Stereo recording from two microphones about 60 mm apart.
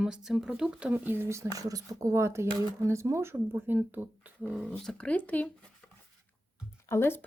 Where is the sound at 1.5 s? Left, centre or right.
Right.